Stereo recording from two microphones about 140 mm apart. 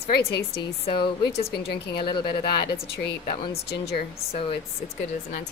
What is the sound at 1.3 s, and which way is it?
Speech, 45° left (ahead or behind).